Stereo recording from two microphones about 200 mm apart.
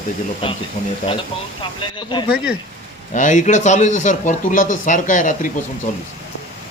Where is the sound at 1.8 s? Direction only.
25° left (ahead or behind).